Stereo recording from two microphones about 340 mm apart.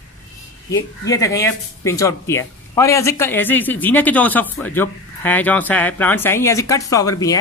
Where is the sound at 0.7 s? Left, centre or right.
Centre.